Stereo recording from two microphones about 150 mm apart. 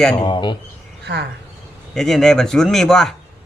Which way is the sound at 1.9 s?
5° left (ahead or behind).